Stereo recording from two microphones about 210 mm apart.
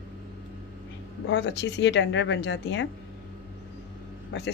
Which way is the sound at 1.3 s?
55° left (ahead or behind).